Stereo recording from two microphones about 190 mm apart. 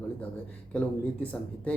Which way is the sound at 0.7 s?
10° left (ahead or behind).